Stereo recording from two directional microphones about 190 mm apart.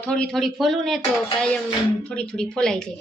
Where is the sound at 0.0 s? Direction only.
5° left (ahead or behind).